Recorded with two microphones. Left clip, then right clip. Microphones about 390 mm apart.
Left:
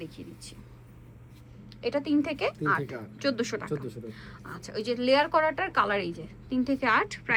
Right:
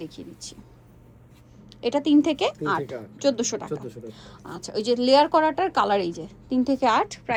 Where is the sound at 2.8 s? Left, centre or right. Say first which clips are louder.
Right 4 dB; centre.